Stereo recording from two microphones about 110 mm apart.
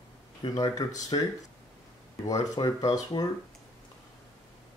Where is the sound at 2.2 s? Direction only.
35° left (ahead or behind).